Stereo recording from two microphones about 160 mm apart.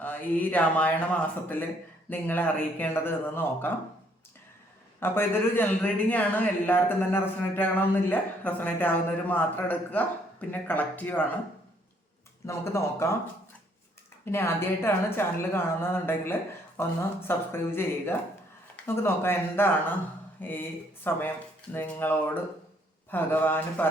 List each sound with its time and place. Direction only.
0.0 s a man's voice: 10° left (ahead or behind)
4.9 s a man's voice: 15° left (ahead or behind)
12.5 s a man's voice: 20° left (ahead or behind)
14.3 s a man's voice: 15° left (ahead or behind)